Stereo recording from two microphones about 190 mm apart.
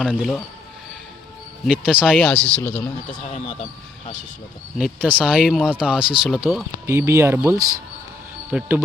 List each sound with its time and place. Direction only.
0.0 s speech: 5° left (ahead or behind)
1.6 s speech: 5° right (ahead or behind)
2.0 s speech: 5° left (ahead or behind)
3.3 s speech: 30° left (ahead or behind)
4.8 s speech: 10° right (ahead or behind)
5.3 s speech: centre (ahead or behind)
6.8 s speech: 15° right (ahead or behind)